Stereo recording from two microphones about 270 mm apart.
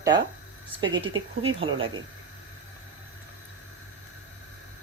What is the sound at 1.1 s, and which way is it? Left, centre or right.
Speech, right.